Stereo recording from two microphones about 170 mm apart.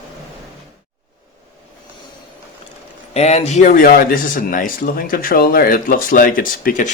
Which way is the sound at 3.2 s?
40° left (ahead or behind).